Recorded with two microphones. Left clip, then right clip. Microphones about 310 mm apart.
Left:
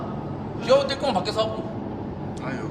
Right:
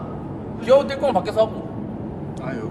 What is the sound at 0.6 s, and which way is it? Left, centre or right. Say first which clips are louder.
Speech: right 4 dB; right.